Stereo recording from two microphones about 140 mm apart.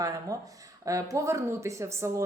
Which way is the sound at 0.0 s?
25° right (ahead or behind).